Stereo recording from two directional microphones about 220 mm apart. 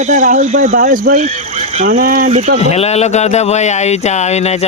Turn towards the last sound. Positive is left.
turn(degrees=30)  # may be behind; listen again after turning